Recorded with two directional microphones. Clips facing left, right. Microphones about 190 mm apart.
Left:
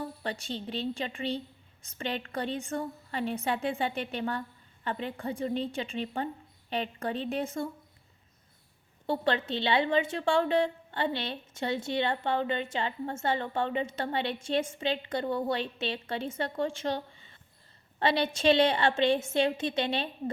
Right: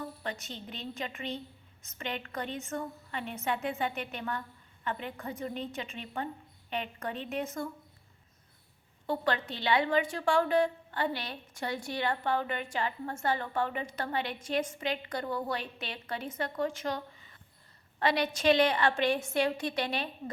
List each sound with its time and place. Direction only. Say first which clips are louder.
0.0 s a woman's voice: left 3 dB; 30° left (ahead or behind)
9.0 s a woman's voice: left 3 dB; 25° left (ahead or behind)